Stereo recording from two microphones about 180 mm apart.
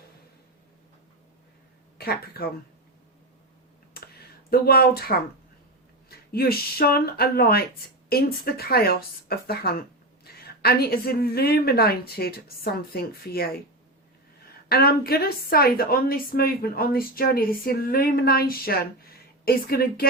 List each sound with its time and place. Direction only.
2.0 s a woman's voice: 60° left (ahead or behind)
3.9 s a sound: 60° left (ahead or behind)
6.1 s a woman's voice: 60° left (ahead or behind)
14.7 s a woman's voice: 60° left (ahead or behind)